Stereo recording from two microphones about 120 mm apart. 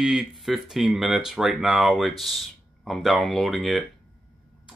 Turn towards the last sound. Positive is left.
turn(degrees=0)  # may be behind; listen again after turning